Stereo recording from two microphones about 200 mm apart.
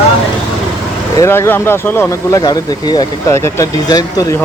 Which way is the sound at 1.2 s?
10° left (ahead or behind).